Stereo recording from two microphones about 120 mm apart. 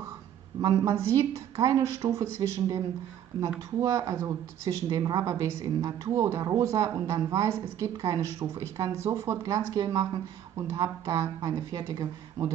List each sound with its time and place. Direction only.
0.6 s a woman's voice: 30° right (ahead or behind)